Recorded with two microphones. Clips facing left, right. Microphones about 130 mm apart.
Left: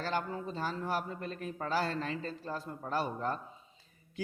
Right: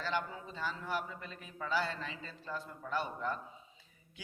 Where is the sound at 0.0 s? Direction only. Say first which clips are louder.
Left 3 dB; 40° left (ahead or behind).